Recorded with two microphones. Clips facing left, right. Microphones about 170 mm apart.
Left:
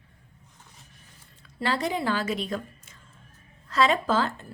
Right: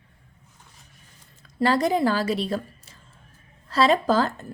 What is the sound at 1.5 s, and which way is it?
A woman's voice, 40° right (ahead or behind).